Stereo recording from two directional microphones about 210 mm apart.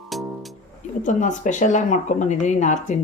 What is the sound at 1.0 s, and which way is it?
Speech, 35° left (ahead or behind).